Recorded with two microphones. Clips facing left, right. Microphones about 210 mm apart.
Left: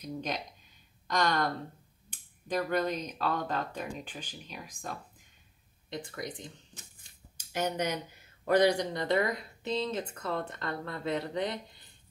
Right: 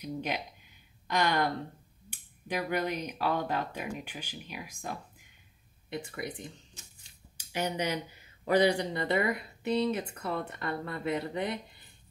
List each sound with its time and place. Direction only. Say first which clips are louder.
0.0 s speech: right 1 dB; 10° right (ahead or behind)
6.1 s speech: right 1 dB; 10° right (ahead or behind)
6.7 s shuffling cards: left 2 dB; 55° left (ahead or behind)
7.5 s speech: even; 10° right (ahead or behind)